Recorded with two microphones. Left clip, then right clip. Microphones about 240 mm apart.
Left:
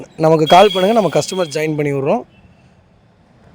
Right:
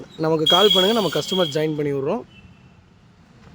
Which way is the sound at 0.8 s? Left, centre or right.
Centre.